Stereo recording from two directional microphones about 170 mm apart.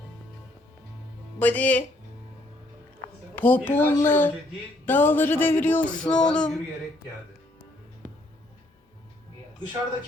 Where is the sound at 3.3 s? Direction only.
10° left (ahead or behind).